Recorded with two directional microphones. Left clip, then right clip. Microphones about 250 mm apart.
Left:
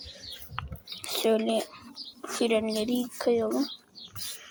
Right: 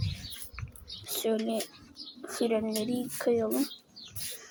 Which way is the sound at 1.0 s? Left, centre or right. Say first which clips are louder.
Left 5 dB; centre.